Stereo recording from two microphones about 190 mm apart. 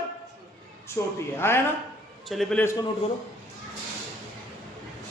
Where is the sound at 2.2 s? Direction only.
Centre (ahead or behind).